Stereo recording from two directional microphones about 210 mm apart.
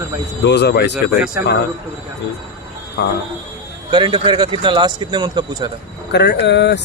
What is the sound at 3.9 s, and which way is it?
Speech, 20° right (ahead or behind).